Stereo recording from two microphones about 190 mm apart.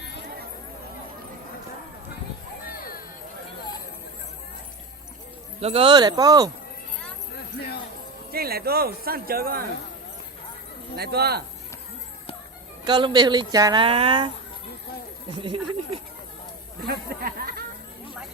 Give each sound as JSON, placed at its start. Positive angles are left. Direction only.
{"t": 2.6, "sound": "music", "side_deg": 50}
{"t": 5.5, "sound": "speech", "side_deg": -30}
{"t": 7.6, "sound": "speech", "side_deg": 60}
{"t": 8.3, "sound": "speech", "side_deg": -55}
{"t": 10.9, "sound": "speech", "side_deg": -55}
{"t": 12.8, "sound": "speech", "side_deg": -25}
{"t": 15.3, "sound": "speech", "side_deg": -25}
{"t": 16.8, "sound": "a sound", "side_deg": -50}